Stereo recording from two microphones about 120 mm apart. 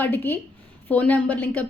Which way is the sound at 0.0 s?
15° left (ahead or behind).